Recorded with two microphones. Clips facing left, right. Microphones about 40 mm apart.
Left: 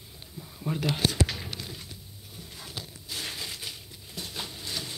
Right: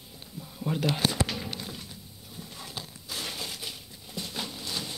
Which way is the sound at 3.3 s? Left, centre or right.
Left.